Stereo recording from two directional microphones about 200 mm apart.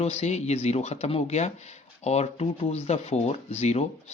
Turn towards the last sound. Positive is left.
turn(degrees=35)  # may be behind; listen again after turning